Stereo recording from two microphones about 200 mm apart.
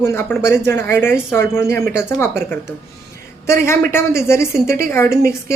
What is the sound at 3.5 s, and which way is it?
Speech, 15° left (ahead or behind).